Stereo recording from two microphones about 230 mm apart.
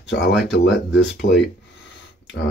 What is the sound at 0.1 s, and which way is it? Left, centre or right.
Speech, left.